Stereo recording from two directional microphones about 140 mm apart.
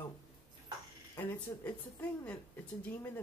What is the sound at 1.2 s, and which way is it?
Speech, 10° left (ahead or behind).